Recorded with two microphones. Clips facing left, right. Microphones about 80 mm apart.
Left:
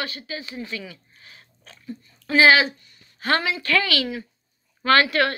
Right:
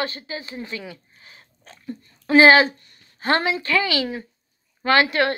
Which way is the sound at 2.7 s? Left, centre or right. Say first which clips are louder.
Right 1 dB; right.